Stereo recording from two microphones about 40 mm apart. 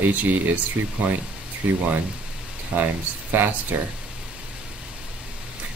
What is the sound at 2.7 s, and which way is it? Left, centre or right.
Speech, right.